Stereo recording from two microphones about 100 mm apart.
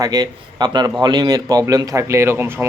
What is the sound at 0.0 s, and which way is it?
A man's voice, 40° right (ahead or behind).